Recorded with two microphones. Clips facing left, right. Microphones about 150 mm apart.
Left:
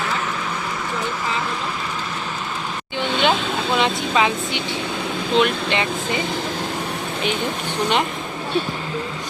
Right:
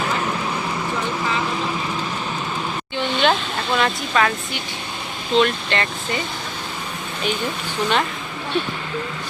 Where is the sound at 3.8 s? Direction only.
20° left (ahead or behind).